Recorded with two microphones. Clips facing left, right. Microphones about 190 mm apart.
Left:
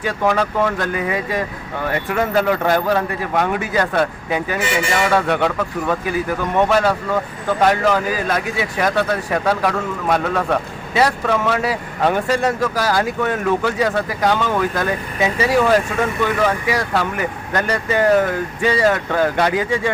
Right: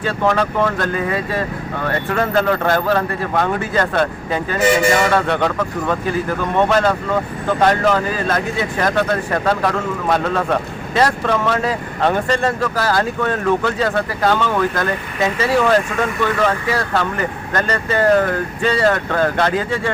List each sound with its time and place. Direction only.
0.0 s speech: 5° left (ahead or behind)
4.6 s a man's voice: 40° right (ahead or behind)
5.1 s speech: 5° left (ahead or behind)